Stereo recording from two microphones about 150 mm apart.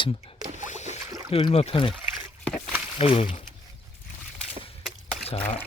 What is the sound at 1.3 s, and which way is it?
Speech, 35° left (ahead or behind).